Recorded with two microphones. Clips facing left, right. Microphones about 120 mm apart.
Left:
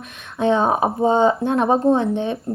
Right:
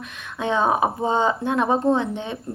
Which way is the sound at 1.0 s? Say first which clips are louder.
Left 5 dB; 20° left (ahead or behind).